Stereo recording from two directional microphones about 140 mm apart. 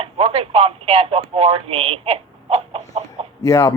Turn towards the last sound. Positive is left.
turn(degrees=25)  # may be behind; listen again after turning